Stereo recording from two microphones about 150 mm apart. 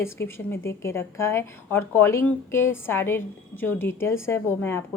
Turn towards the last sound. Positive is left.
turn(degrees=15)  # may be behind; listen again after turning